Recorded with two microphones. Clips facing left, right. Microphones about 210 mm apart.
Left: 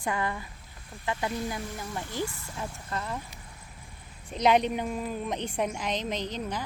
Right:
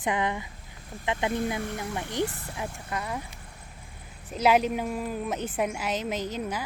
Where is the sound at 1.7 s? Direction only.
20° right (ahead or behind).